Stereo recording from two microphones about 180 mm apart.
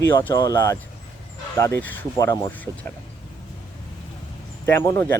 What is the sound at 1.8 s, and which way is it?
Speech, 10° left (ahead or behind).